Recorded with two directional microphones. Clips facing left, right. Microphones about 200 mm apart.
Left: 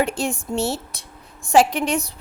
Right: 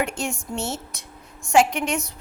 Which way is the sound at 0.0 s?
35° left (ahead or behind).